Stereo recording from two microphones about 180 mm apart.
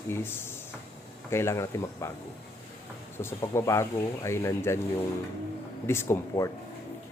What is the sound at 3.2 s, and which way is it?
Speech, 15° left (ahead or behind).